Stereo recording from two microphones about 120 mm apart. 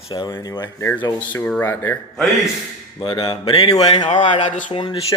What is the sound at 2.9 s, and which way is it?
Speech, 45° left (ahead or behind).